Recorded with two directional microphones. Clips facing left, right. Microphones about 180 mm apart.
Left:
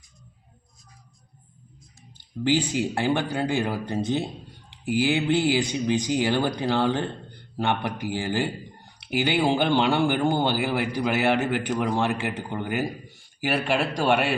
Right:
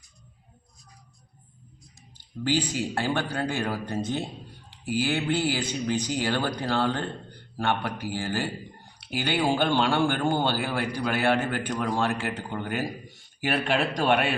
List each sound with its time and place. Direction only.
2.4 s speech: 20° left (ahead or behind)